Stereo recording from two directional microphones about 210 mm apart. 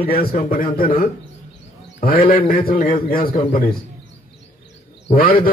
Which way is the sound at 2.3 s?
40° left (ahead or behind).